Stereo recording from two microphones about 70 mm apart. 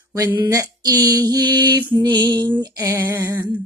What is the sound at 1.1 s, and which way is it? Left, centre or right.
Female singing, right.